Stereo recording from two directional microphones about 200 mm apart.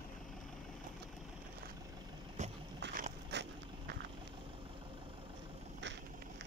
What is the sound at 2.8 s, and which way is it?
Dog, 60° right (ahead or behind).